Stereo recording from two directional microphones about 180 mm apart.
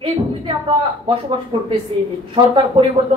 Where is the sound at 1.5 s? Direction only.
30° right (ahead or behind).